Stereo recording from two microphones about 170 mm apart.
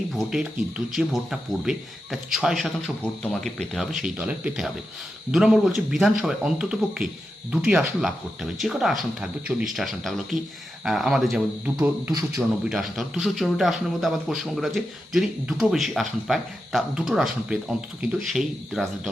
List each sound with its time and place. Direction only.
0.1 s speech: 5° right (ahead or behind)
11.8 s speech: 15° right (ahead or behind)
12.6 s speech: centre (ahead or behind)